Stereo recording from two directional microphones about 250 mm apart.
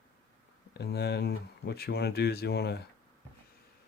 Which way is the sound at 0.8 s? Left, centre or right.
Left.